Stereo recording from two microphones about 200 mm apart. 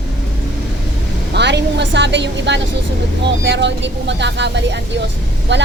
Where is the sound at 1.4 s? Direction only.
60° right (ahead or behind).